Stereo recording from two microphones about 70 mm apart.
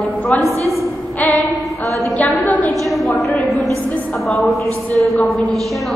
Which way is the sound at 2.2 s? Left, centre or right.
Left.